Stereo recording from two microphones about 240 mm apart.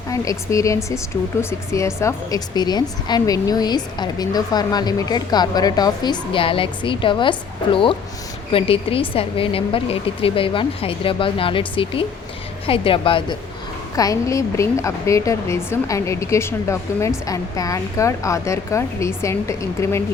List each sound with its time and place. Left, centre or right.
0.1 s a woman's voice: centre